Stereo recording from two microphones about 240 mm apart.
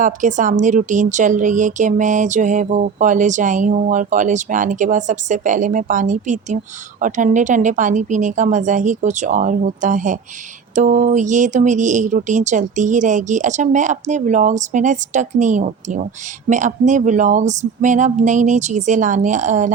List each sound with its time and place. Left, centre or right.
0.0 s speech: right